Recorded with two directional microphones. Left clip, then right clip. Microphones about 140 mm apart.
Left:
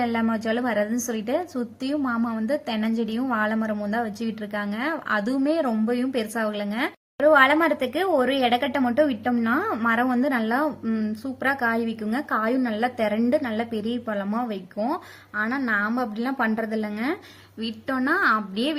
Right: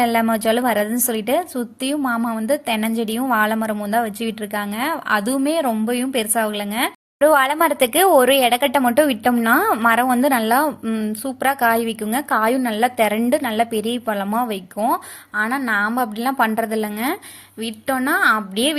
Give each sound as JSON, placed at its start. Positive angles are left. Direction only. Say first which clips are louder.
{"t": 0.0, "sound": "a woman's voice", "louder": "right 8 dB", "side_deg": -30}
{"t": 7.2, "sound": "speech", "louder": "right 2 dB", "side_deg": -45}
{"t": 10.8, "sound": "a woman's voice", "louder": "right 4 dB", "side_deg": -25}